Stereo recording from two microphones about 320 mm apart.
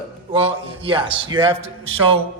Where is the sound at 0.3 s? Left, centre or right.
Centre.